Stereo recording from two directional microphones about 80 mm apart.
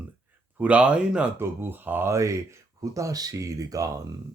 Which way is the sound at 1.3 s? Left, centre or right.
Right.